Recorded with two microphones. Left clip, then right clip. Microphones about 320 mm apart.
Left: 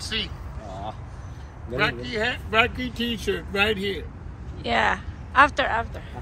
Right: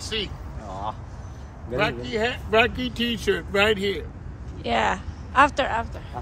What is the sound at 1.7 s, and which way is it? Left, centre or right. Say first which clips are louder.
Speech: even; right.